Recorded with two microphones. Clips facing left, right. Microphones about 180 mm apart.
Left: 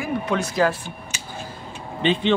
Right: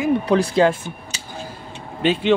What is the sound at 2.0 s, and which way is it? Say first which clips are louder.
Speech: right 3 dB; 5° right (ahead or behind).